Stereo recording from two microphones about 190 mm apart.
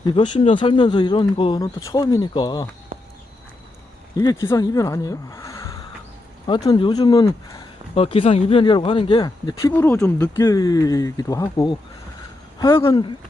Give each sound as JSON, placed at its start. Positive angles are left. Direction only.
{"t": 0.0, "sound": "speech", "side_deg": 25}
{"t": 2.9, "sound": "a sound", "side_deg": -45}
{"t": 4.2, "sound": "speech", "side_deg": 20}
{"t": 6.5, "sound": "speech", "side_deg": 25}
{"t": 7.9, "sound": "speech", "side_deg": 30}